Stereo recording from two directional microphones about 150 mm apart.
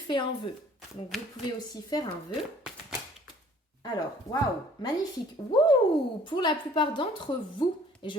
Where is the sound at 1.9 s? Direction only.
25° left (ahead or behind).